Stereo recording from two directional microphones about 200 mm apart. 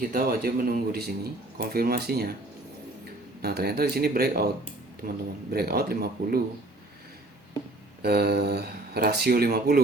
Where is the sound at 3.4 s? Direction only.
50° right (ahead or behind).